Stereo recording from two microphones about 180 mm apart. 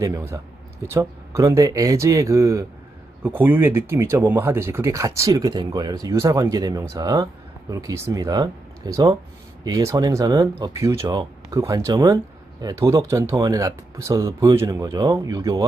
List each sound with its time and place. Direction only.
0.0 s speech: 15° right (ahead or behind)